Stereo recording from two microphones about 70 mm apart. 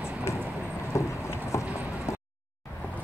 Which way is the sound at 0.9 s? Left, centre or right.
Left.